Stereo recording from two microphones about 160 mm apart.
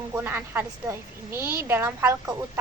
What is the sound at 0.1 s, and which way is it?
A woman's voice, 10° right (ahead or behind).